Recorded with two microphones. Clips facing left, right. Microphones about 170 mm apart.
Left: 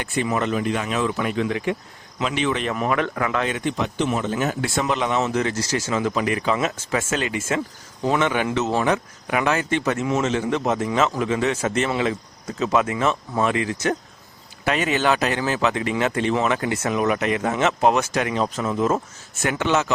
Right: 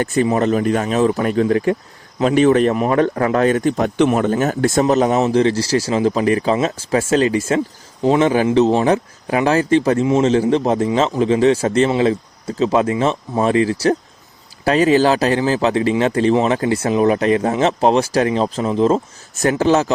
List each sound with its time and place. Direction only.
0.0 s speech: 40° right (ahead or behind)
3.9 s speech: 60° right (ahead or behind); by 19.9 s 35° right (ahead or behind)